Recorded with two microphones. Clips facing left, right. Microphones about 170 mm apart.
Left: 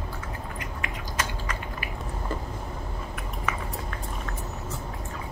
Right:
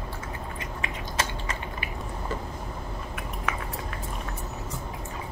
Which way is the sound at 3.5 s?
Centre (ahead or behind).